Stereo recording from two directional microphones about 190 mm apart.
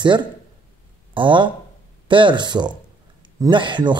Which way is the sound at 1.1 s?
25° right (ahead or behind).